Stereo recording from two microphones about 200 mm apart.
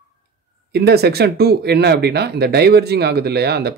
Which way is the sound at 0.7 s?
55° right (ahead or behind).